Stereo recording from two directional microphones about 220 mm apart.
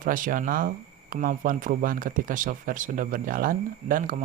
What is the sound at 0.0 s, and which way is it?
Speech, 40° right (ahead or behind).